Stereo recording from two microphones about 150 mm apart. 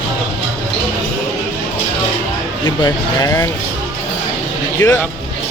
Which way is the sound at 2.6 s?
25° left (ahead or behind).